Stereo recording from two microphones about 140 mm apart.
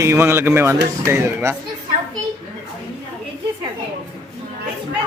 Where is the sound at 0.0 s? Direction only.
20° right (ahead or behind).